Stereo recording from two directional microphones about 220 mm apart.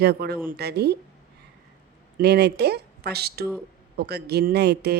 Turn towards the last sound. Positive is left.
turn(degrees=-50)  # may be behind; listen again after turning